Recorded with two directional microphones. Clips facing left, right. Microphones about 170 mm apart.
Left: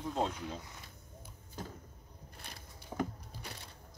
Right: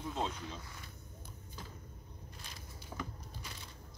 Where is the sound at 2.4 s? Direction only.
60° left (ahead or behind).